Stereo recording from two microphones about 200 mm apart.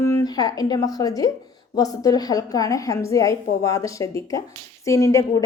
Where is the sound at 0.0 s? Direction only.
15° left (ahead or behind).